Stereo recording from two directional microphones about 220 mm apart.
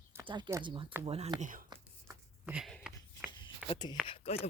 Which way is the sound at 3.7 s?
20° left (ahead or behind).